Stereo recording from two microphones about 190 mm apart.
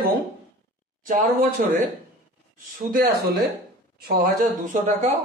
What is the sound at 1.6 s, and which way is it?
Speech, 45° right (ahead or behind).